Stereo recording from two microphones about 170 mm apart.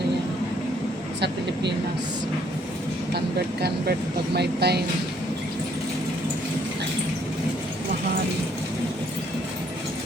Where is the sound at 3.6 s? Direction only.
70° right (ahead or behind).